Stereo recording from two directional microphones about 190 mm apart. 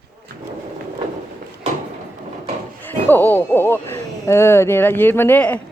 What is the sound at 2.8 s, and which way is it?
A woman's voice, 10° left (ahead or behind).